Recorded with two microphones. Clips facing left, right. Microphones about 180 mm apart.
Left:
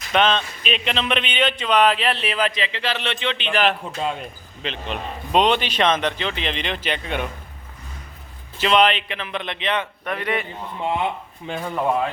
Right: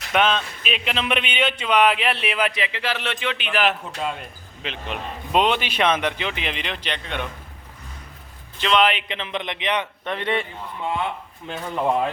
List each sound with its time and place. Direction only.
0.1 s a man's voice: 10° right (ahead or behind)
8.5 s a man's voice: 5° left (ahead or behind)
8.9 s a man's voice: 15° right (ahead or behind)
11.5 s speech: 5° left (ahead or behind)